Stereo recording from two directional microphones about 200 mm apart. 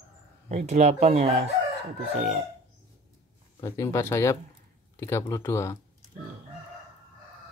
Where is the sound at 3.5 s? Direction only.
15° left (ahead or behind).